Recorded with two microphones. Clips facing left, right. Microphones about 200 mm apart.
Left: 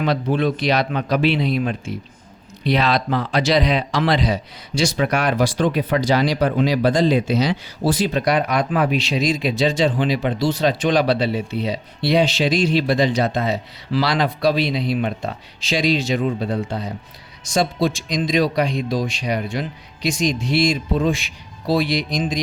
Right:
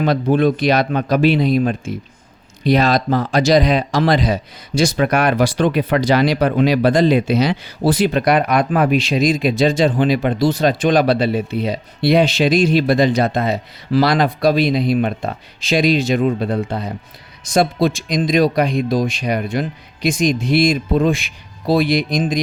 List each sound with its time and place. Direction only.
0.0 s speech: 50° right (ahead or behind)